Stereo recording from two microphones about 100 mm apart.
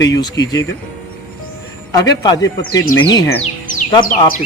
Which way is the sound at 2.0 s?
40° left (ahead or behind).